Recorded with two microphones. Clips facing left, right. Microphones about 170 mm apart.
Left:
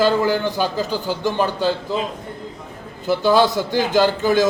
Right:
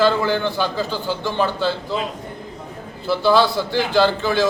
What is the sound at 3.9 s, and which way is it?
Speech, 15° left (ahead or behind).